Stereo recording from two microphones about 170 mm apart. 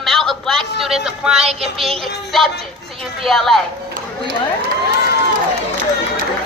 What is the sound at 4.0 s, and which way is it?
Run, 55° right (ahead or behind).